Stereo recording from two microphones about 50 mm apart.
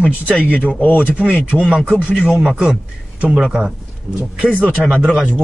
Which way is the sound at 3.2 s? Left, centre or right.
Centre.